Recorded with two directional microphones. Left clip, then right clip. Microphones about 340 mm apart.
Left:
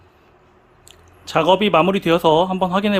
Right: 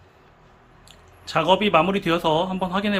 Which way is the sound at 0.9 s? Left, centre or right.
Left.